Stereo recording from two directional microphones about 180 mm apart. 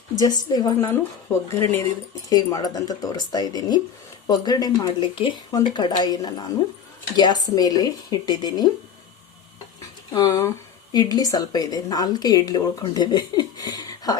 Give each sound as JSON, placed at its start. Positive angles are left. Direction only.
{"t": 0.2, "sound": "a woman's voice", "side_deg": 20}
{"t": 10.1, "sound": "a woman's voice", "side_deg": 20}